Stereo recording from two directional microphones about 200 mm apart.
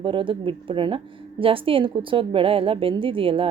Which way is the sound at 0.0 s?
25° right (ahead or behind).